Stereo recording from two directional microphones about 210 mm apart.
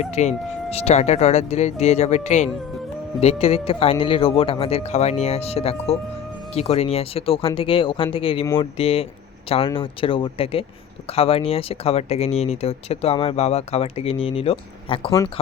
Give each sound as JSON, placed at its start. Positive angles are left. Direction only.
{"t": 0.0, "sound": "speech", "side_deg": 30}